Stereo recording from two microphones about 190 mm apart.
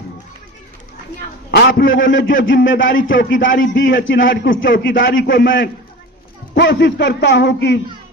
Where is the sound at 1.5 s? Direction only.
60° left (ahead or behind).